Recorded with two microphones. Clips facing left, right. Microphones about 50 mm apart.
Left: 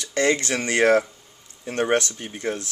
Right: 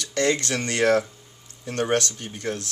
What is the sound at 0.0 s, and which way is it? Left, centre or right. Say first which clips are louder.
Speech: left 2 dB; left.